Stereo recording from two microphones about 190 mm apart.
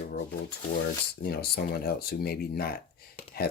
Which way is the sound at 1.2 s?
55° left (ahead or behind).